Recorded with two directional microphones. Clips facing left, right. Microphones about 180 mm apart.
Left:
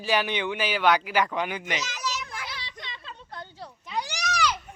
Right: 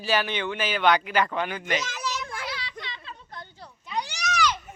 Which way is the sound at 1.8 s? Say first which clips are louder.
Right 1 dB; 55° right (ahead or behind).